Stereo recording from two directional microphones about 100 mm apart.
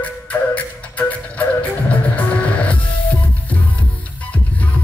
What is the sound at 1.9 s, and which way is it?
Music, 15° left (ahead or behind).